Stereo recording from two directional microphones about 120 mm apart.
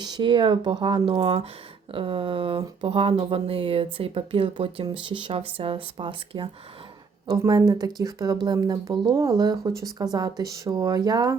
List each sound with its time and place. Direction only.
0.0 s speech: 40° right (ahead or behind)
7.3 s speech: 30° right (ahead or behind)